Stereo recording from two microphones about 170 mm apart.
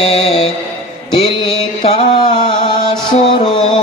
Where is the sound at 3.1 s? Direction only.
35° left (ahead or behind).